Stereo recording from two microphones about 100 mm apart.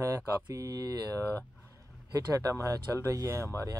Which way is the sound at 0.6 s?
35° right (ahead or behind).